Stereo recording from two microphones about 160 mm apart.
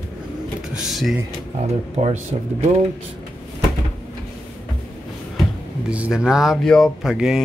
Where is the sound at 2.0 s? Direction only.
45° right (ahead or behind).